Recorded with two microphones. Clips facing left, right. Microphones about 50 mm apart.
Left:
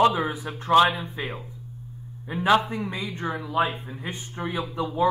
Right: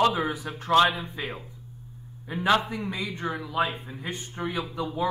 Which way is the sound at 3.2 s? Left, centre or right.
Centre.